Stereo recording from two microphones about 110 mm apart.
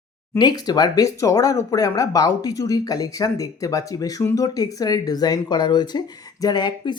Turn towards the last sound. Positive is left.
turn(degrees=45)  # may be behind; listen again after turning